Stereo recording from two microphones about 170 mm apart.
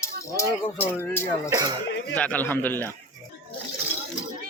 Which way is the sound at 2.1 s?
10° left (ahead or behind).